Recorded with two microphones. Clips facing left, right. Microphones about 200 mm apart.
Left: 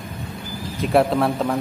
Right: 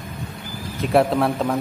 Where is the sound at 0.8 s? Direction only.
Centre (ahead or behind).